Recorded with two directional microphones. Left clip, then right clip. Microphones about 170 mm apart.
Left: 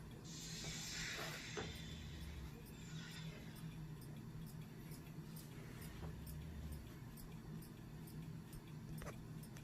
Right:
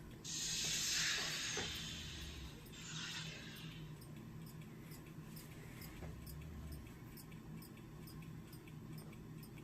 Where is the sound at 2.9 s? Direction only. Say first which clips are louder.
Right 9 dB; 25° right (ahead or behind).